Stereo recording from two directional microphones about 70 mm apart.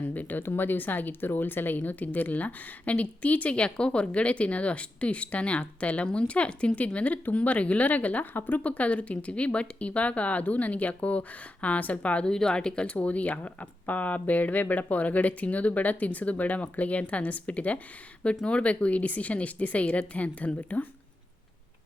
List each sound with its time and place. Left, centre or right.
0.0 s speech: left